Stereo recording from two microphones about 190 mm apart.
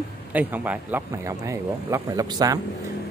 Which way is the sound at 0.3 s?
10° right (ahead or behind).